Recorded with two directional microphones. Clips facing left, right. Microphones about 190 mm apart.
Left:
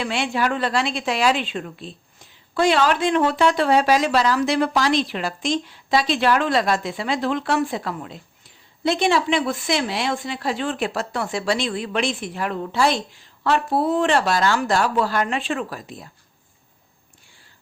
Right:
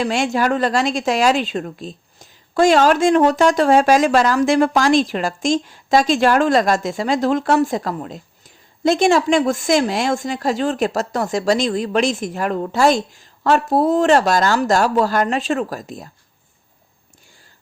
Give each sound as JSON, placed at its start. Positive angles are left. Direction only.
{"t": 0.0, "sound": "a woman's voice", "side_deg": -45}